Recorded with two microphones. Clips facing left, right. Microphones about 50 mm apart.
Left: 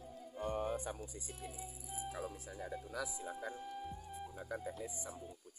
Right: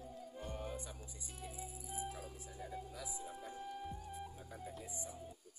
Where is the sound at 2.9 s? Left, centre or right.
Left.